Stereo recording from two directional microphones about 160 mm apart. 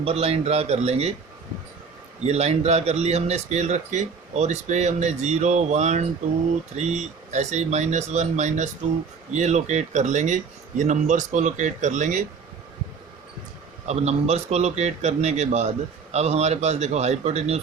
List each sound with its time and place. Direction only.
0.0 s speech: 40° right (ahead or behind)
2.2 s speech: 40° right (ahead or behind)
13.8 s speech: 45° right (ahead or behind)